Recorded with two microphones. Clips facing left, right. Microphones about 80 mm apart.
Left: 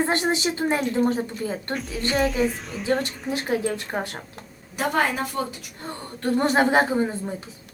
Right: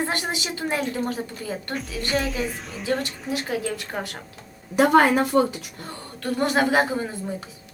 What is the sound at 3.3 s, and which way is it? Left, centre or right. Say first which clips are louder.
Speech: left 2 dB; left.